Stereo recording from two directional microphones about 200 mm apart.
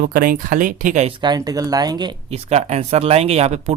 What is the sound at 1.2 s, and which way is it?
Speech, 20° right (ahead or behind).